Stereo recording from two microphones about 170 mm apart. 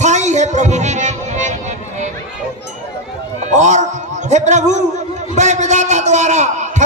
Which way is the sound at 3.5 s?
45° right (ahead or behind).